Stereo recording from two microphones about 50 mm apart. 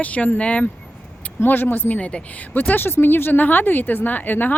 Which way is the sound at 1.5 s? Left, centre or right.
Left.